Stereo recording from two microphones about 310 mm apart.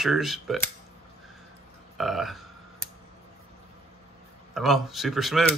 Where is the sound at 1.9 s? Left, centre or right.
Centre.